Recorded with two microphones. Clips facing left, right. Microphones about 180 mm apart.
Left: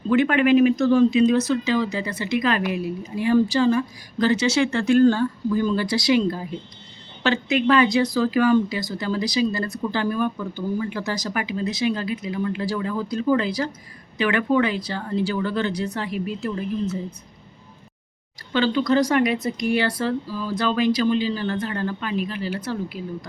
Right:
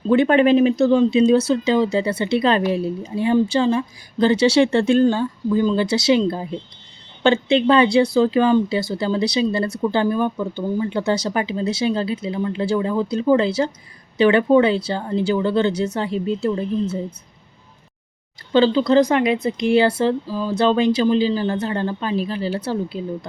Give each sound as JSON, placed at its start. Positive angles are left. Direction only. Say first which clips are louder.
{"t": 0.1, "sound": "speech", "louder": "right 3 dB", "side_deg": -30}
{"t": 18.5, "sound": "speech", "louder": "right 5 dB", "side_deg": -30}